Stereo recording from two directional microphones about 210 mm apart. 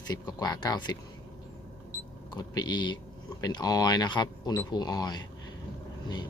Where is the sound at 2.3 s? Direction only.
20° left (ahead or behind).